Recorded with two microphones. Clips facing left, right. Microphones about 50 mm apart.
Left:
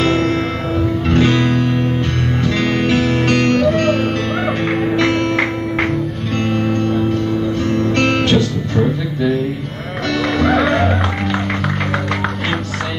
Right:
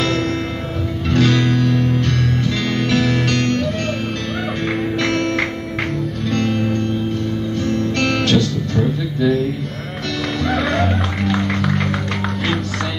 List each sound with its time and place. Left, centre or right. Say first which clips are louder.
1.0 s music: even; left
2.9 s music: left 2 dB; centre
3.3 s music: left 4 dB; left
3.5 s music: left 7 dB; left
4.9 s music: left 3 dB; centre
6.3 s music: left 2 dB; left
10.4 s music: left 4 dB; centre